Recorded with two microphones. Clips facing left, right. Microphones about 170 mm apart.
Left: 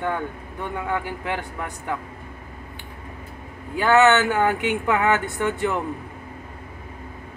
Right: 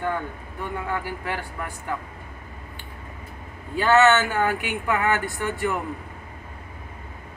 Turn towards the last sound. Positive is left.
turn(degrees=20)  # may be behind; listen again after turning